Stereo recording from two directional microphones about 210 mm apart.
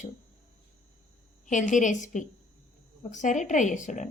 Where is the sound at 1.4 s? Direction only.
35° left (ahead or behind).